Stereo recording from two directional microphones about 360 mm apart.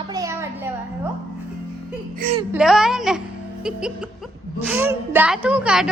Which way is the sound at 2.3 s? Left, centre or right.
Centre.